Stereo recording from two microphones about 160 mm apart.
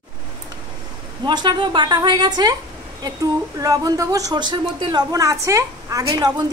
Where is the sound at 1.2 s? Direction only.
25° right (ahead or behind).